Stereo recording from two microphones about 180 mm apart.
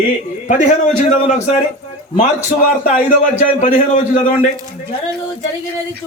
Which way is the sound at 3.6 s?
50° left (ahead or behind).